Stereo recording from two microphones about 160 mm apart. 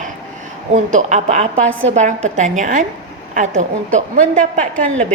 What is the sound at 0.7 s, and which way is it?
A woman's voice, 50° right (ahead or behind).